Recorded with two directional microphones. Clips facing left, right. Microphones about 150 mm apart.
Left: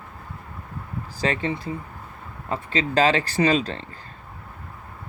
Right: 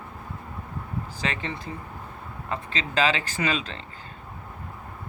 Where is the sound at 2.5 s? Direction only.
35° left (ahead or behind).